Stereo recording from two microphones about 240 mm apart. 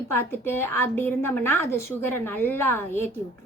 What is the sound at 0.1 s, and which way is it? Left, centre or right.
A woman's voice, centre.